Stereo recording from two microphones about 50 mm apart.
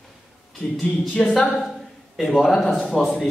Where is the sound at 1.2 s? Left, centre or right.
Left.